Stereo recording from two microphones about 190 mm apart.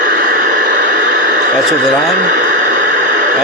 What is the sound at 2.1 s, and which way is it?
Radio, 40° right (ahead or behind).